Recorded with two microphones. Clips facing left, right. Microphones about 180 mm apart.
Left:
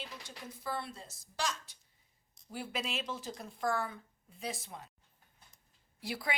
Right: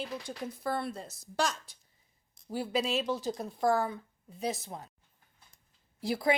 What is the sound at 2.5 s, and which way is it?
Speech, 35° right (ahead or behind).